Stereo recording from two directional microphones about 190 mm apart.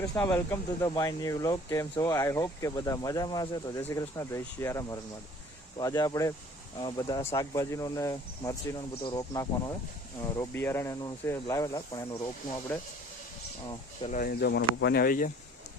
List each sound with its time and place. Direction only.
0.2 s speech: 15° left (ahead or behind)
14.1 s speech: 50° left (ahead or behind)